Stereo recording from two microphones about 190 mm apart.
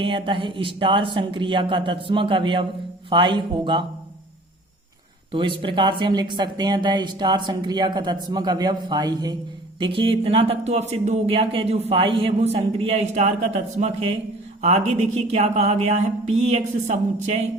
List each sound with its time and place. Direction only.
0.0 s speech: 25° right (ahead or behind)
5.3 s speech: 25° right (ahead or behind)